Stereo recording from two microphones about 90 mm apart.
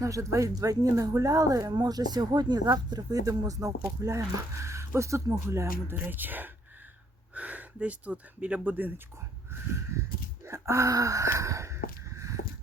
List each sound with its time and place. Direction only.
0.0 s speech: 35° right (ahead or behind)
6.0 s speech: 20° right (ahead or behind)
10.4 s gasp: 30° right (ahead or behind)